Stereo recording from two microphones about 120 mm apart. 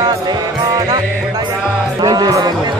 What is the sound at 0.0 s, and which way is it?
Music, 35° right (ahead or behind).